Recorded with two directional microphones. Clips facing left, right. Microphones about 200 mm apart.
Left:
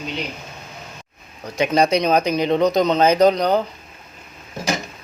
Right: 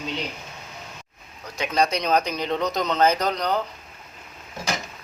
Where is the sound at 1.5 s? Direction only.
15° left (ahead or behind).